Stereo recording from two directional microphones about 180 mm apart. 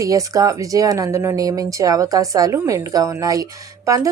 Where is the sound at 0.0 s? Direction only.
20° right (ahead or behind).